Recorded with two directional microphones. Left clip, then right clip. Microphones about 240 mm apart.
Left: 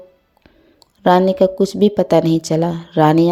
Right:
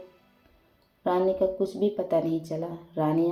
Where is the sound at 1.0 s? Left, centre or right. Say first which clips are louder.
Left 12 dB; left.